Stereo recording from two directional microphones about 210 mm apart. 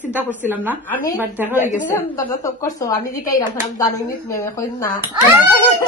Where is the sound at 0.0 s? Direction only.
10° right (ahead or behind).